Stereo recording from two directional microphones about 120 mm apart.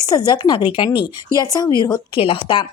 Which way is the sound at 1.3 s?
30° left (ahead or behind).